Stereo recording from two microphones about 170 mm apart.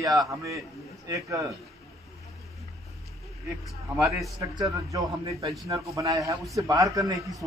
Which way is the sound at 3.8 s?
20° right (ahead or behind).